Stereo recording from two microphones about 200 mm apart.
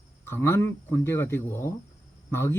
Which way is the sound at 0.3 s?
10° left (ahead or behind).